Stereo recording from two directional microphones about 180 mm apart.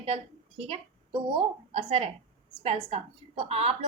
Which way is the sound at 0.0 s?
30° right (ahead or behind).